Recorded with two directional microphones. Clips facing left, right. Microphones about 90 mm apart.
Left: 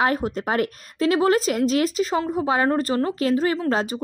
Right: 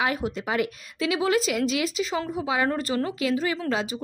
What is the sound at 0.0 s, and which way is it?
A woman's voice, 40° left (ahead or behind).